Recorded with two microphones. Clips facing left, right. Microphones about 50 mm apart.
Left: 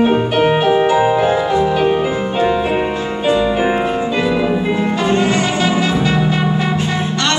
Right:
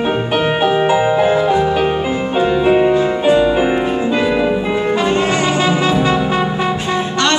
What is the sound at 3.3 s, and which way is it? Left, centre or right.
Music, right.